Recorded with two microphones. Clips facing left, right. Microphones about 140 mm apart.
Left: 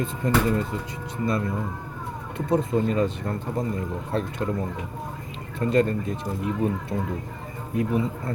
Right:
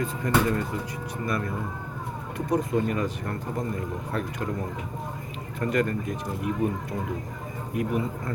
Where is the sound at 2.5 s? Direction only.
25° left (ahead or behind).